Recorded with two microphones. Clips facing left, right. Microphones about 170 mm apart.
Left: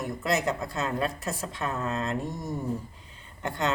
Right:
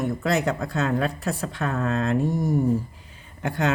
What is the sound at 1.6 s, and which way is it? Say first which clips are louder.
Speech: right 5 dB; 60° right (ahead or behind).